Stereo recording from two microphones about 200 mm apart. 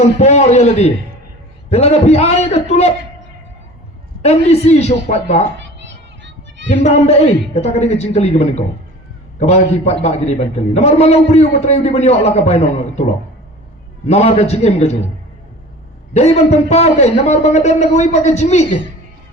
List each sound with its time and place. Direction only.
0.2 s a man's voice: 35° left (ahead or behind)
4.2 s a man's voice: 30° left (ahead or behind)
6.8 s a man's voice: 30° left (ahead or behind)
14.1 s a man's voice: 30° left (ahead or behind)
16.1 s a man's voice: 30° left (ahead or behind)